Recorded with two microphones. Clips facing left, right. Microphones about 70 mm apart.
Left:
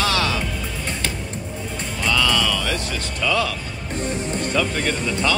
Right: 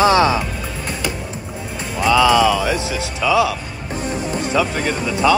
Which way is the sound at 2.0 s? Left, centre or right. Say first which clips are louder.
Right 8 dB; centre.